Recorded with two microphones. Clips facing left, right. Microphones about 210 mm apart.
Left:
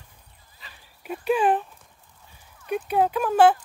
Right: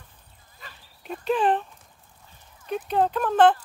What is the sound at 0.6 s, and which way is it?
Dog, 50° right (ahead or behind).